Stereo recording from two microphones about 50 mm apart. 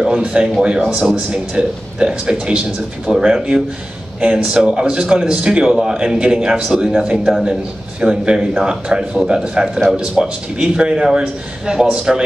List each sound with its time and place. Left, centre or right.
0.1 s speech: right; by 1.1 s centre
1.1 s a man's voice: right